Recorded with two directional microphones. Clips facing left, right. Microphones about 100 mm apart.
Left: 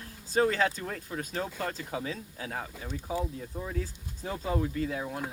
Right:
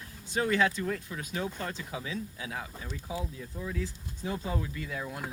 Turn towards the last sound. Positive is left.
turn(degrees=35)  # may be behind; listen again after turning